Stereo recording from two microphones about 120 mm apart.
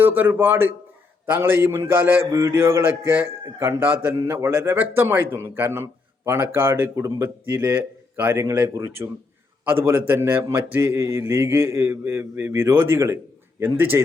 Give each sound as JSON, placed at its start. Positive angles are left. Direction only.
{"t": 0.0, "sound": "a man's voice", "side_deg": -15}